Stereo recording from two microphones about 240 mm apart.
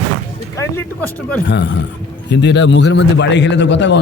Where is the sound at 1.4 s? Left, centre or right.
Left.